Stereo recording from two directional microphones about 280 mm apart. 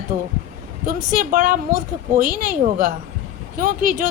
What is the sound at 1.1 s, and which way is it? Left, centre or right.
Speech, right.